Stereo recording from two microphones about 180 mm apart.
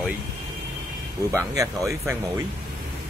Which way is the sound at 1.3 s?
20° right (ahead or behind).